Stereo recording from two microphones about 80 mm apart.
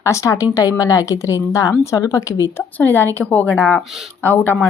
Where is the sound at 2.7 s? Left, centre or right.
Left.